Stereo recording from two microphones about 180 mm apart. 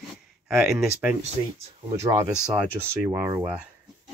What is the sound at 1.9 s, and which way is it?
Speech, 15° right (ahead or behind).